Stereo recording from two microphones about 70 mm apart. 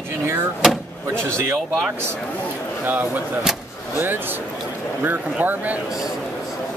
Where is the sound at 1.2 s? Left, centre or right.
Right.